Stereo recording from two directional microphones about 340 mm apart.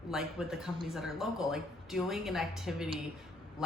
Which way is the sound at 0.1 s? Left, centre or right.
Centre.